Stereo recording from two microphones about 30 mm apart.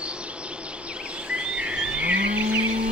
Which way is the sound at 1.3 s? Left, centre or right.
Right.